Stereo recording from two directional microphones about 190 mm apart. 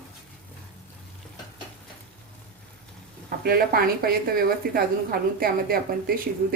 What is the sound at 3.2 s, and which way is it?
Speech, 50° right (ahead or behind).